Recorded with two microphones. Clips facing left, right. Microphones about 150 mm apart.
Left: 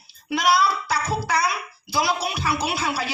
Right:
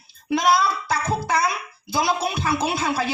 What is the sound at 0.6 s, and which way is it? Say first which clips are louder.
A woman's voice: even; 20° right (ahead or behind).